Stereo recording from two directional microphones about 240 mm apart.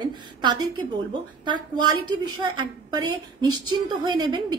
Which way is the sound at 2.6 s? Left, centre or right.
Centre.